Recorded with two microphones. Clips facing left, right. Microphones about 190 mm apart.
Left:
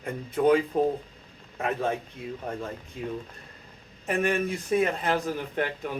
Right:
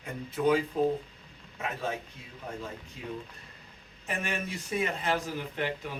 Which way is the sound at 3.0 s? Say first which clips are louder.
Left 6 dB; 55° left (ahead or behind).